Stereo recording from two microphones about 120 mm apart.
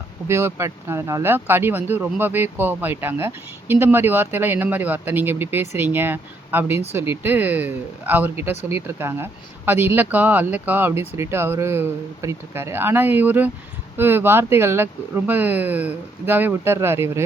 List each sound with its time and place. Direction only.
0.3 s speech: 20° right (ahead or behind)